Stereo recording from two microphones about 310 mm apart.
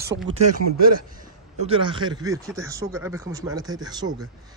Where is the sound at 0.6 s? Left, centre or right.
Right.